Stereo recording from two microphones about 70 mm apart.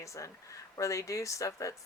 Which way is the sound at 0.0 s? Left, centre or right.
Left.